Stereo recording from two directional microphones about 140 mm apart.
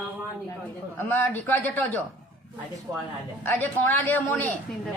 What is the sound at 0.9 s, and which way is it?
A man's voice, 15° left (ahead or behind).